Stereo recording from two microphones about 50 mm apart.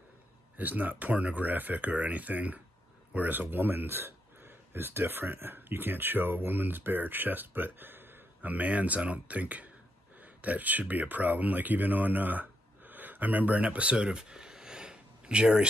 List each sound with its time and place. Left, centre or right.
0.6 s speech: right; by 15.7 s centre